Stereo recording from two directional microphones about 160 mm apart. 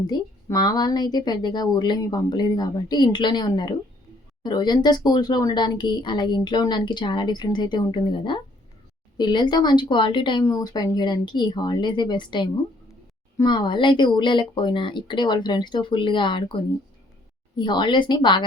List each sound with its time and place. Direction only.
0.1 s speech: 25° left (ahead or behind)
17.6 s speech: 30° left (ahead or behind)